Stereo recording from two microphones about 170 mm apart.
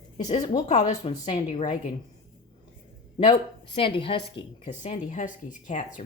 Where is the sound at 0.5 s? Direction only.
40° left (ahead or behind).